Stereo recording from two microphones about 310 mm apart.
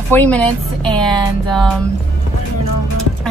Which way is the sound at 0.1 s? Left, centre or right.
Centre.